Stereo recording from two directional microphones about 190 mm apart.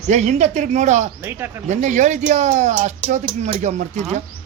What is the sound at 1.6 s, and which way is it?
Speech, 40° right (ahead or behind).